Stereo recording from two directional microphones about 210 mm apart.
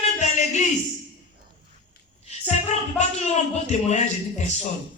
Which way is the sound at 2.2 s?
30° left (ahead or behind).